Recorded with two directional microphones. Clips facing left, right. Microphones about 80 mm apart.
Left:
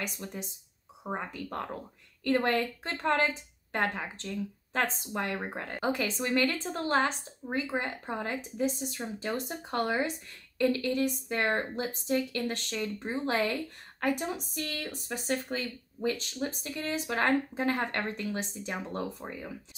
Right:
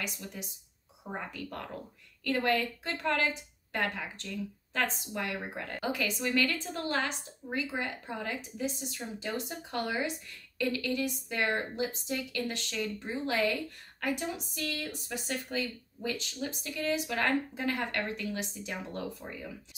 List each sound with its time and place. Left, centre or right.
0.0 s a woman's voice: left